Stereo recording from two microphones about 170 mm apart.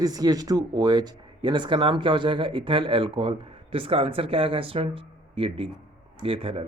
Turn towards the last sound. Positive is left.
turn(degrees=-35)  # may be behind; listen again after turning